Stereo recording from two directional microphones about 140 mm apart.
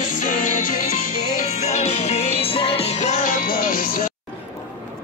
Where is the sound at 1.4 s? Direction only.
50° left (ahead or behind); by 4.1 s 80° left.